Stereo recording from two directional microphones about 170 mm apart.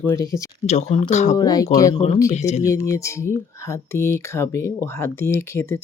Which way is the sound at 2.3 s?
40° left (ahead or behind).